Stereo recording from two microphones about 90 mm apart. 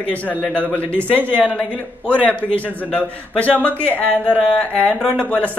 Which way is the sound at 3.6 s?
20° left (ahead or behind).